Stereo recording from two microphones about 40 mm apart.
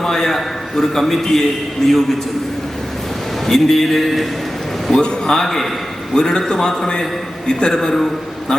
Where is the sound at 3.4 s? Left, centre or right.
Centre.